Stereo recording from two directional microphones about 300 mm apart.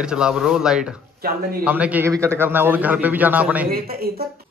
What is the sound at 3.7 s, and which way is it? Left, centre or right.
Speech, right.